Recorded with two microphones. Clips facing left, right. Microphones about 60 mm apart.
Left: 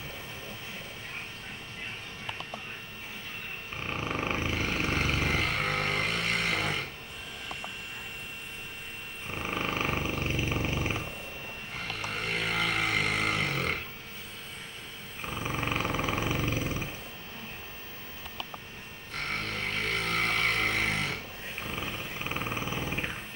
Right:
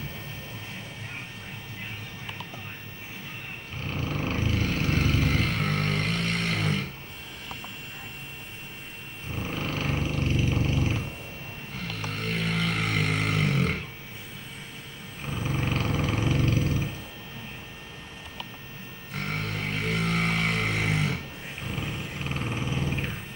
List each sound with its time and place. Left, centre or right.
3.8 s vehicle: left; by 6.8 s centre
9.3 s vehicle: left
11.9 s vehicle: centre
15.2 s roar: centre
19.1 s a sound: centre
21.6 s roar: centre